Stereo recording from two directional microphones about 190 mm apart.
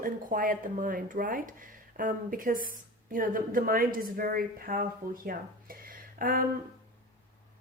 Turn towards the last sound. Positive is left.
turn(degrees=-45)  # may be behind; listen again after turning